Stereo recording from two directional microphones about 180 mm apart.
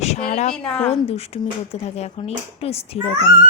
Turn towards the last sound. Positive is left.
turn(degrees=35)  # may be behind; listen again after turning